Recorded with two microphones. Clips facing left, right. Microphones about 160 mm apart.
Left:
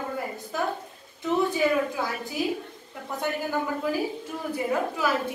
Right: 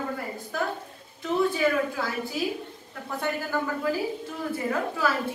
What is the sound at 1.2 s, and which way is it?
A woman's voice, 20° left (ahead or behind).